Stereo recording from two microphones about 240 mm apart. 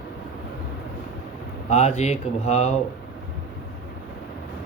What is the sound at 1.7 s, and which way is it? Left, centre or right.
Speech, left.